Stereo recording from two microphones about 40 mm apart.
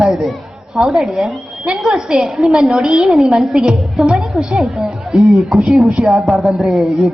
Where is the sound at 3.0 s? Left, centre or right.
Centre.